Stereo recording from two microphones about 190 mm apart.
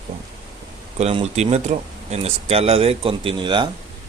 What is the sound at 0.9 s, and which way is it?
Speech, 35° right (ahead or behind).